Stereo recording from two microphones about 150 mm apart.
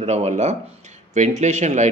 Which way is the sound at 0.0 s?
45° right (ahead or behind).